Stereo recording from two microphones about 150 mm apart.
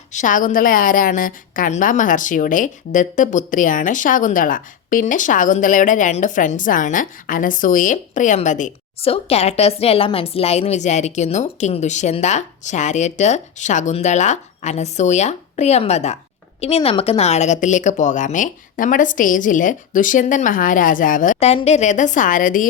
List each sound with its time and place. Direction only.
0.1 s a woman's voice: 55° left (ahead or behind)
9.0 s a woman's voice: 40° left (ahead or behind); by 21.3 s 60° left (ahead or behind)
21.3 s a woman's voice: 45° left (ahead or behind); by 22.6 s 60° left (ahead or behind)